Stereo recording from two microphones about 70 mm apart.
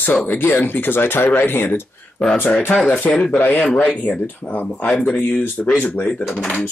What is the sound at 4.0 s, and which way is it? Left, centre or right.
Speech, left.